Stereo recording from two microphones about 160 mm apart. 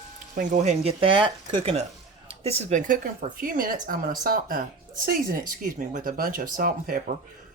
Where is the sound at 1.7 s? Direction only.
40° right (ahead or behind); by 7.0 s 60° right (ahead or behind).